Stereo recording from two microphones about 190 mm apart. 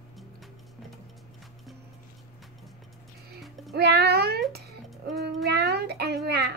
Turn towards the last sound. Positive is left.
turn(degrees=-60)  # may be behind; listen again after turning